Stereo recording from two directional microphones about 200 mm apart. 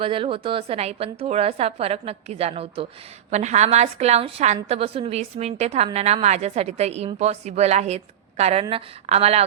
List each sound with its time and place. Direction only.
0.0 s a woman's voice: 25° right (ahead or behind)